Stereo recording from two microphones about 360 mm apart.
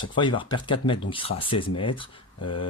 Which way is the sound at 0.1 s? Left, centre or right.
Centre.